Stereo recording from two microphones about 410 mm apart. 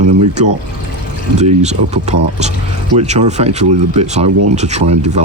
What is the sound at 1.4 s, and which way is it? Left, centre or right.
Speech, centre.